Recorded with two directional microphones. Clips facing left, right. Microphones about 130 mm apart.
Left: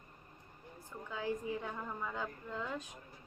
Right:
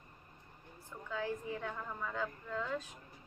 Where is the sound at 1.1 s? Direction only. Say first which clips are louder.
Left 1 dB; 15° left (ahead or behind).